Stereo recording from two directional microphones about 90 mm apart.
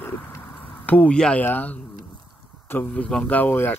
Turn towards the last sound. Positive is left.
turn(degrees=25)  # may be behind; listen again after turning